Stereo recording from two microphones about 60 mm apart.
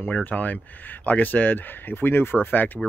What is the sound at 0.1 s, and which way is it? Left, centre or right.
Speech, left.